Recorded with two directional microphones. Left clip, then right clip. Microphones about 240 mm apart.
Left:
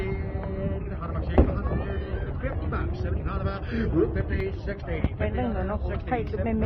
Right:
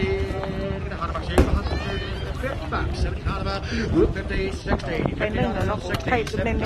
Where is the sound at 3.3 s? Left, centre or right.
Right.